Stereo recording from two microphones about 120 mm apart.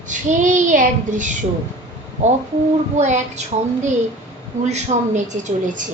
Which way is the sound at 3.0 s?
80° right.